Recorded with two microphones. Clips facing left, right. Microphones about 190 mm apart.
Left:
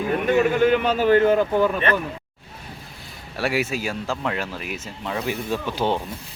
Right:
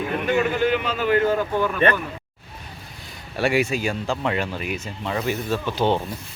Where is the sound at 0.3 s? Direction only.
40° left (ahead or behind).